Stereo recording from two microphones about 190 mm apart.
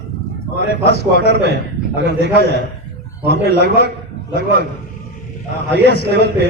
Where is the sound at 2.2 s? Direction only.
55° left (ahead or behind).